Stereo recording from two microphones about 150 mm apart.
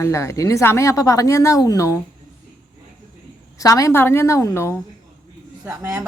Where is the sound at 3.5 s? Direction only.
20° left (ahead or behind).